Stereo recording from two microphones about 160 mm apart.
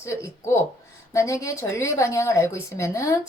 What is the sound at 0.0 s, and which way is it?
A woman's voice, 20° left (ahead or behind).